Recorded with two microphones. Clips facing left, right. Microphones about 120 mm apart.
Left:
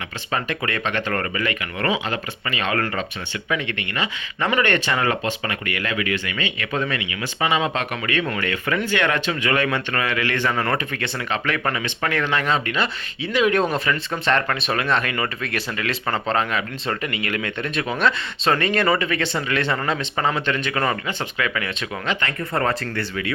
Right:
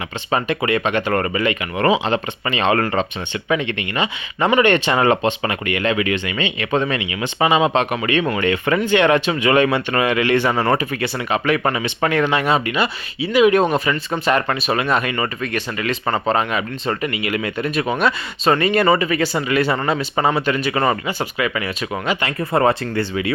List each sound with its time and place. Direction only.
0.3 s speech: 20° right (ahead or behind)
10.5 s speech: 25° right (ahead or behind)
10.8 s speech: 15° right (ahead or behind)